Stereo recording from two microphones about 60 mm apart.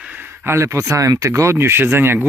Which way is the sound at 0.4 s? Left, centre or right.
Right.